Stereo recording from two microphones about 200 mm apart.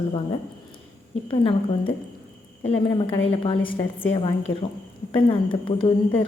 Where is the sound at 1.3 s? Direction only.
25° left (ahead or behind).